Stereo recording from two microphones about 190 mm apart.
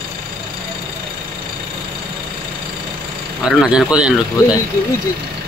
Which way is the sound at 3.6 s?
5° right (ahead or behind).